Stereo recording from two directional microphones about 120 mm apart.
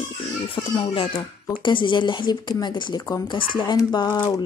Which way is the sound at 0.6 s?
35° left (ahead or behind).